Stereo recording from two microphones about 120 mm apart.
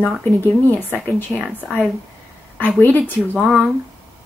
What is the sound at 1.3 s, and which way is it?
Speech, 10° left (ahead or behind).